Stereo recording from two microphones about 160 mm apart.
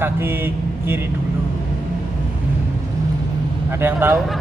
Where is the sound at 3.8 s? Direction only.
15° right (ahead or behind).